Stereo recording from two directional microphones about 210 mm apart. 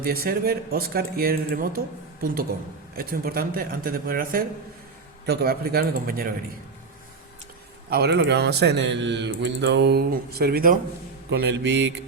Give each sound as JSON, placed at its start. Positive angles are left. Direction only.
{"t": 0.0, "sound": "speech", "side_deg": -45}
{"t": 7.9, "sound": "a man's voice", "side_deg": -50}